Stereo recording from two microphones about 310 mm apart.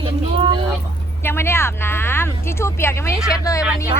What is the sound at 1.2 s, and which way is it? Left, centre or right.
Speech, centre.